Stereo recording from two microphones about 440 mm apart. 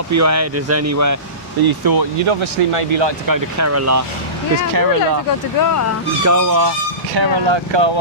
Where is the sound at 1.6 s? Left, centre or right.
Right.